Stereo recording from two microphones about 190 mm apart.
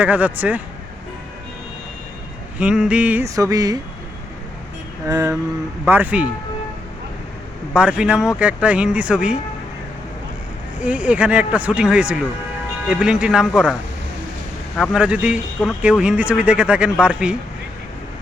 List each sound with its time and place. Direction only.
0.0 s speech: 10° right (ahead or behind)
2.6 s speech: 5° right (ahead or behind)
5.0 s speech: 15° right (ahead or behind)
7.7 s speech: 5° right (ahead or behind)
10.8 s speech: 5° right (ahead or behind)
14.8 s speech: 5° right (ahead or behind)